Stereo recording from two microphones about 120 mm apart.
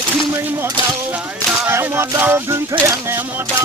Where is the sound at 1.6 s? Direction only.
20° right (ahead or behind).